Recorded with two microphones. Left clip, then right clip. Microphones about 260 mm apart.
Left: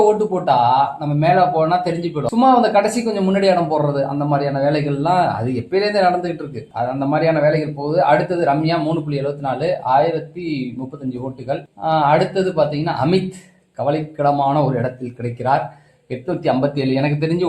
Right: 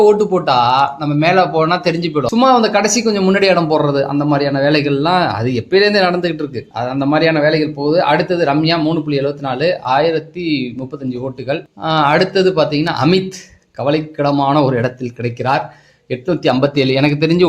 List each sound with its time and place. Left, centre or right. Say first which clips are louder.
0.4 s speech: right 1 dB; right
11.4 s speech: right 1 dB; right
16.2 s speech: right 4 dB; right